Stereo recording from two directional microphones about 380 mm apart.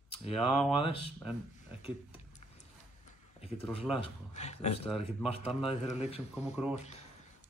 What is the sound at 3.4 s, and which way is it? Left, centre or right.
A man's voice, centre.